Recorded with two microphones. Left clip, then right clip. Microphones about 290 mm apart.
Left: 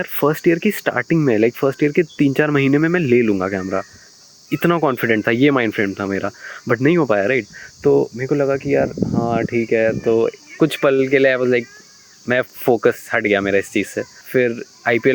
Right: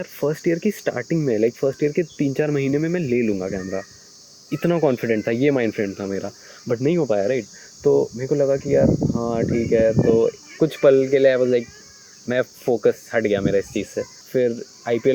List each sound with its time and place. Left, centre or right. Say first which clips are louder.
0.0 s speech: left 6 dB; left